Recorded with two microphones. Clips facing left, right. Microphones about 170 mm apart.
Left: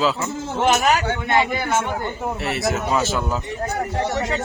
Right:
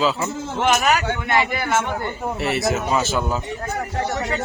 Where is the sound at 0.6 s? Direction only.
30° left (ahead or behind).